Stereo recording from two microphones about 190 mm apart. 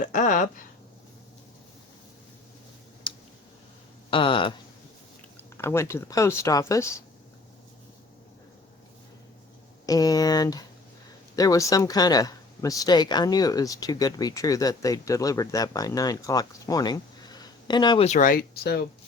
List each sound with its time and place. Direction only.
0.0 s a sound: 45° left (ahead or behind)
3.1 s clicking: 25° left (ahead or behind)
4.1 s speech: 25° left (ahead or behind)
5.5 s speech: 15° left (ahead or behind)
9.8 s speech: 20° left (ahead or behind); by 18.9 s 55° left (ahead or behind)